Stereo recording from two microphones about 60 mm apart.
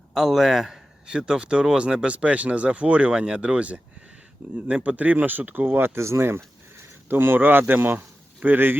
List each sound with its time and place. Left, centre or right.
0.1 s a man's voice: centre
1.0 s speech: centre; by 8.7 s right